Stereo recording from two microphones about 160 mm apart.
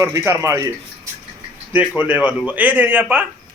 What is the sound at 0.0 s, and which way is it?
Speech, 20° right (ahead or behind).